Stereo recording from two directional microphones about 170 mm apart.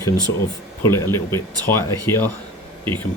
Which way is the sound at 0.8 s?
15° left (ahead or behind).